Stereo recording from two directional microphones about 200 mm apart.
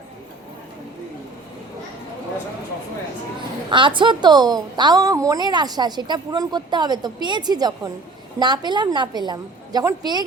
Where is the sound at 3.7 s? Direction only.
25° right (ahead or behind).